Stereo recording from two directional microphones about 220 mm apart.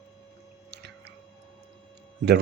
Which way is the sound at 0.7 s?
50° right (ahead or behind).